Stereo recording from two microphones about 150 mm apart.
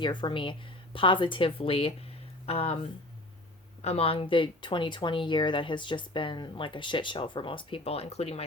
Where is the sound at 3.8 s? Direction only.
40° left (ahead or behind).